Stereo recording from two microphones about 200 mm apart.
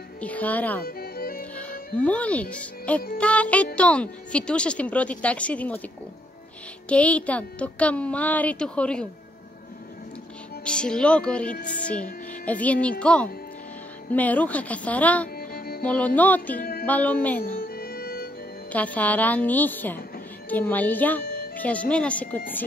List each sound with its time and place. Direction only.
0.2 s a child's voice: 5° left (ahead or behind)
0.8 s music: 50° left (ahead or behind)
1.4 s music: 5° left (ahead or behind)
2.0 s a child's voice: 5° left (ahead or behind)
6.9 s a child's voice: 5° left (ahead or behind)
10.6 s a woman's voice: 5° left (ahead or behind)
15.3 s music: 50° left (ahead or behind)
15.8 s a child's voice: 5° left (ahead or behind)
17.6 s music: 50° left (ahead or behind)
18.7 s a child's voice: 5° left (ahead or behind)